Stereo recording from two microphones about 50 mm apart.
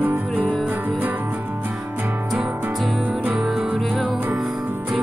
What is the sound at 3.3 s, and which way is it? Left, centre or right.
Music, centre.